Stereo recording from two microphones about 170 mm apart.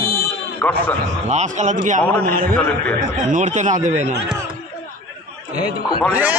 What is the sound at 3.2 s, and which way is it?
Speech, 45° right (ahead or behind).